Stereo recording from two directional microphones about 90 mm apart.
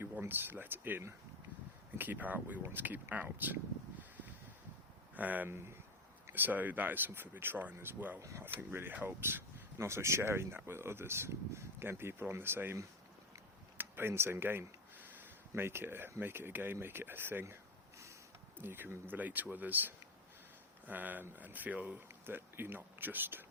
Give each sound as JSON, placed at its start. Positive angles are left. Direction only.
{"t": 0.0, "sound": "speech", "side_deg": -25}
{"t": 5.1, "sound": "speech", "side_deg": -20}
{"t": 18.6, "sound": "speech", "side_deg": -25}